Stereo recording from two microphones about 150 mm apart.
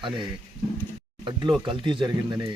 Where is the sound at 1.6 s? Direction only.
30° right (ahead or behind).